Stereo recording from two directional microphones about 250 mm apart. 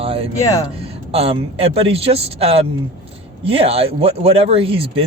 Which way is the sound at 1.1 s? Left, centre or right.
Right.